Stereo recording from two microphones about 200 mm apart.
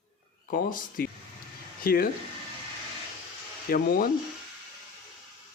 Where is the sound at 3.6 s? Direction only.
45° left (ahead or behind).